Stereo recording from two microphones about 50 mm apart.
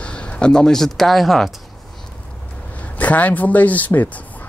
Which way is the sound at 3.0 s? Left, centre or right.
Left.